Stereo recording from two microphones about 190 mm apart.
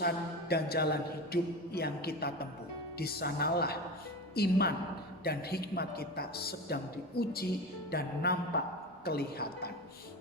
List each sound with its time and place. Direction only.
0.0 s a man's voice: 55° left (ahead or behind)